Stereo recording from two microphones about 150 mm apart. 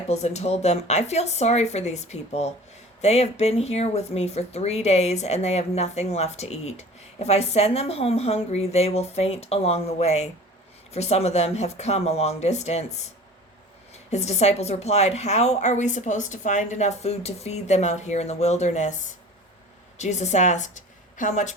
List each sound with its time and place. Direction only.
0.1 s a woman's voice: 45° left (ahead or behind)